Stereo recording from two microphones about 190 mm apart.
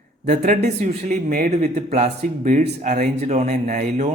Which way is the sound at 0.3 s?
40° right (ahead or behind).